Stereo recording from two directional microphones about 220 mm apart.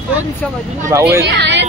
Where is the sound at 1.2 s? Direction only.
50° right (ahead or behind).